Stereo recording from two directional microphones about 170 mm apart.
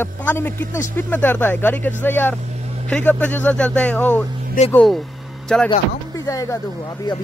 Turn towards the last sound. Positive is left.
turn(degrees=25)  # may be behind; listen again after turning